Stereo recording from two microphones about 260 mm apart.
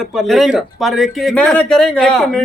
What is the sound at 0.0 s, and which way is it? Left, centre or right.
Speech, centre.